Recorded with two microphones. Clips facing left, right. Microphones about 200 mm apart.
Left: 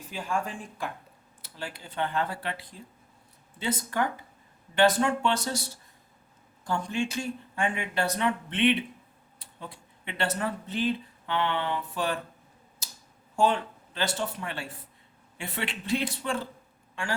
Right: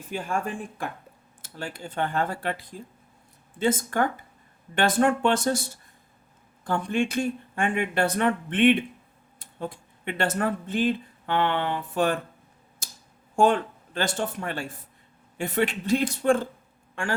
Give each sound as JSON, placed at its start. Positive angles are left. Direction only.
{"t": 0.1, "sound": "speech", "side_deg": -55}
{"t": 13.3, "sound": "speech", "side_deg": -50}